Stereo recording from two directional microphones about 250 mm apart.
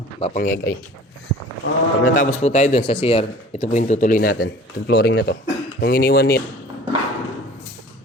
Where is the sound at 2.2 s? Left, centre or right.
Left.